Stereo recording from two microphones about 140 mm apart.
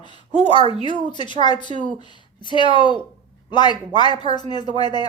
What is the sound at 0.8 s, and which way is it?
Speech, 35° left (ahead or behind).